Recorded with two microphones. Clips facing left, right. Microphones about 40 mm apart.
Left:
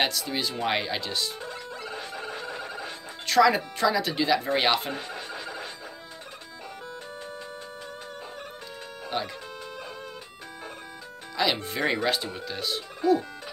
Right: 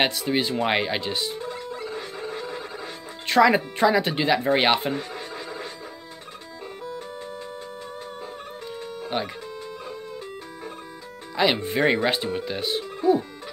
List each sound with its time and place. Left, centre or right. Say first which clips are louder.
0.0 s speech: right 4 dB; right
2.1 s a sound: right 3 dB; left
3.3 s speech: right 3 dB; right
9.1 s speech: right 2 dB; right
11.3 s speech: right 5 dB; right